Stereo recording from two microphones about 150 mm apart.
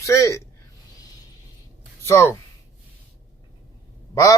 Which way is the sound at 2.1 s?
20° left (ahead or behind).